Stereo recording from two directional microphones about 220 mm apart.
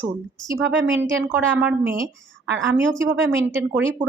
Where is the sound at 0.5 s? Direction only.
55° right (ahead or behind).